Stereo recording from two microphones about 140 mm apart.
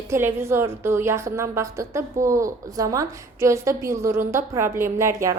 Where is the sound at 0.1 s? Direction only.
15° right (ahead or behind).